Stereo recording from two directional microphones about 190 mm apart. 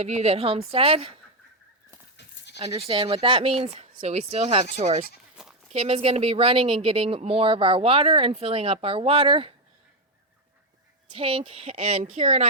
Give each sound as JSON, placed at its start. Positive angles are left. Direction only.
{"t": 0.0, "sound": "speech", "side_deg": -35}
{"t": 2.1, "sound": "goat", "side_deg": 65}
{"t": 2.6, "sound": "speech", "side_deg": -30}
{"t": 5.4, "sound": "sheep", "side_deg": -5}
{"t": 5.7, "sound": "speech", "side_deg": -35}
{"t": 11.1, "sound": "speech", "side_deg": -30}